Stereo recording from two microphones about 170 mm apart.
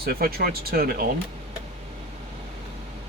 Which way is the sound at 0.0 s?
60° right (ahead or behind).